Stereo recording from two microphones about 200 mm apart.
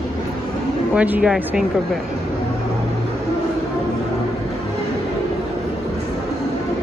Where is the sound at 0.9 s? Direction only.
5° right (ahead or behind).